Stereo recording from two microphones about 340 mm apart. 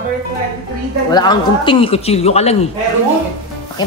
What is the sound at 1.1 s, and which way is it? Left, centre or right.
A man's voice, centre.